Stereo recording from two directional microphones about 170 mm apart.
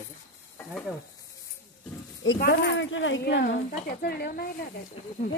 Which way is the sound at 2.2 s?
90° left.